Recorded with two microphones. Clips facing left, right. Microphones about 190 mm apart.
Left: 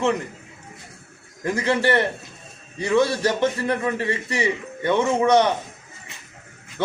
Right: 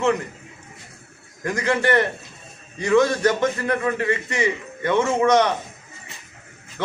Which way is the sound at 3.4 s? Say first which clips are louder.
Even; 30° left (ahead or behind).